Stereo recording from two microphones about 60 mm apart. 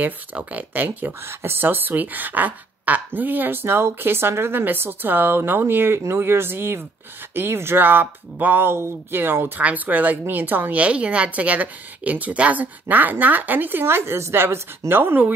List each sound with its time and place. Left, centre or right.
0.0 s a woman's voice: right
9.6 s speech: right
10.8 s a woman's voice: centre